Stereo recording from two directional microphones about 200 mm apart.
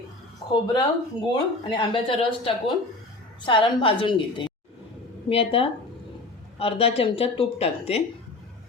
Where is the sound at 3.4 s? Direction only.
25° left (ahead or behind).